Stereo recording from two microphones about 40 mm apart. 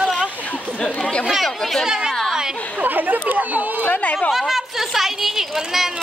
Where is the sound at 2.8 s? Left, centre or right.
Right.